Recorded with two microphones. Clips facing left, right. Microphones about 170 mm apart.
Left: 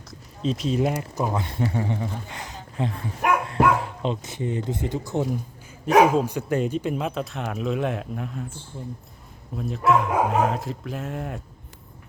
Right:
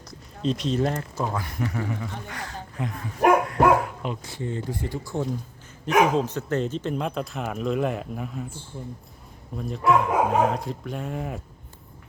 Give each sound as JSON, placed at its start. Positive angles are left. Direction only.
{"t": 0.1, "sound": "speech", "side_deg": 0}
{"t": 9.6, "sound": "speech", "side_deg": 0}